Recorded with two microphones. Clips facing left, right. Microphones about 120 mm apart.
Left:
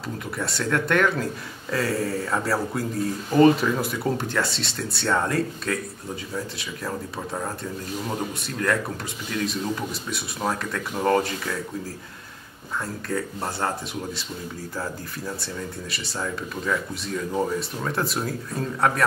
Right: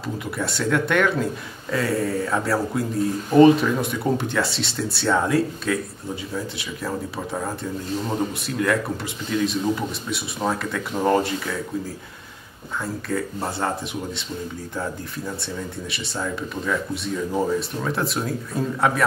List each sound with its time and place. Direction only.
0.4 s speech: centre (ahead or behind)
9.3 s speech: centre (ahead or behind)
12.8 s speech: centre (ahead or behind)